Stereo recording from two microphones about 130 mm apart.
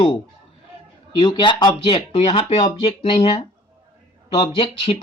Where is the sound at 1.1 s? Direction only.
40° left (ahead or behind).